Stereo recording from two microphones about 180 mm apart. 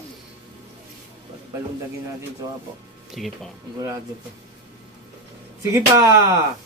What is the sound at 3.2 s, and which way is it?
Speech, centre (ahead or behind).